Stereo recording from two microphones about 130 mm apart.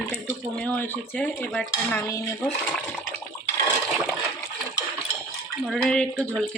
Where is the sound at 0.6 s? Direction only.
10° left (ahead or behind).